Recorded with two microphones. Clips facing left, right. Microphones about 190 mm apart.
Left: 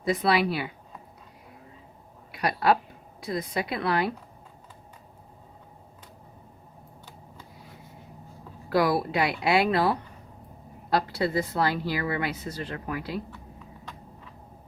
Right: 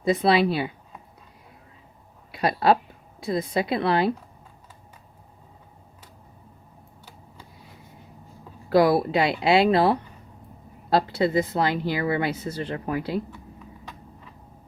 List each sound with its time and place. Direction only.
0.0 s a woman's voice: 25° right (ahead or behind)
2.3 s a woman's voice: 25° right (ahead or behind)
8.7 s a woman's voice: 25° right (ahead or behind)